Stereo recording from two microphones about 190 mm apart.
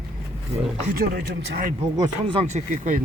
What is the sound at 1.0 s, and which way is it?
Speech, 60° right (ahead or behind).